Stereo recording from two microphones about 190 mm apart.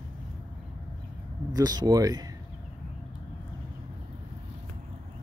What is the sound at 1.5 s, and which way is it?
Speech, 20° right (ahead or behind).